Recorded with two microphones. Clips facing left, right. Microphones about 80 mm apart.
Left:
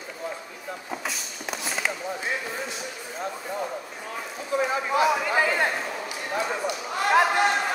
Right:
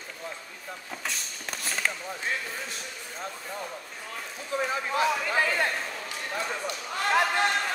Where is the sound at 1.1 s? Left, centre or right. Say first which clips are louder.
Even; centre.